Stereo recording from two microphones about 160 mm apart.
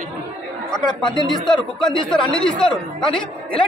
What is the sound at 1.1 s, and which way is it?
Speech, 30° left (ahead or behind).